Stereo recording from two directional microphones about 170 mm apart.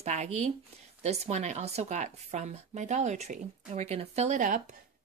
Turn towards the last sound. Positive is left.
turn(degrees=-50)  # may be behind; listen again after turning